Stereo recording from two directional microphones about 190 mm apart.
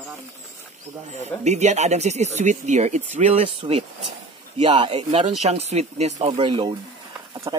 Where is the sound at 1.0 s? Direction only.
35° right (ahead or behind).